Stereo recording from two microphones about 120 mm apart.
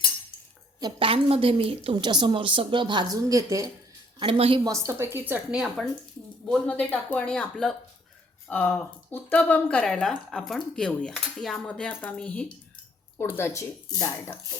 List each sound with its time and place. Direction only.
0.9 s a woman's voice: 50° right (ahead or behind); by 3.7 s 30° right (ahead or behind)
4.2 s a woman's voice: 50° right (ahead or behind)
4.6 s a woman's voice: 25° right (ahead or behind)
5.5 s speech: centre (ahead or behind)
8.4 s speech: 15° left (ahead or behind)